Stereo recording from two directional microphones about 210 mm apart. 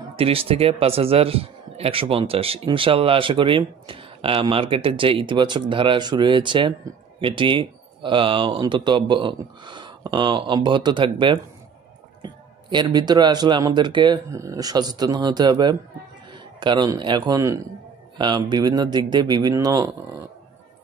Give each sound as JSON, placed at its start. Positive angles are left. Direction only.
{"t": 0.1, "sound": "speech", "side_deg": -25}